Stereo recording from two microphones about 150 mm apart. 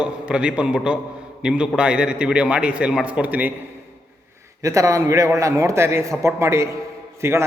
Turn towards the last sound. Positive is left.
turn(degrees=-20)  # may be behind; listen again after turning